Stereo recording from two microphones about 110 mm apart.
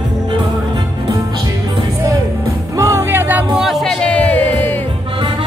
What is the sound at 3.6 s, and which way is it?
Music, centre (ahead or behind).